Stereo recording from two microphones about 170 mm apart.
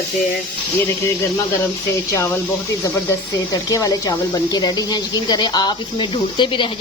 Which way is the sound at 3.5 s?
20° left (ahead or behind).